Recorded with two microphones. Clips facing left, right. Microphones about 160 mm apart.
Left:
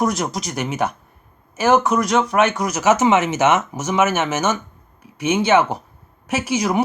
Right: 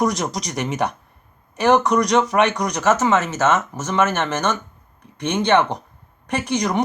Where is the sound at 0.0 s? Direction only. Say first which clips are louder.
Even; centre (ahead or behind).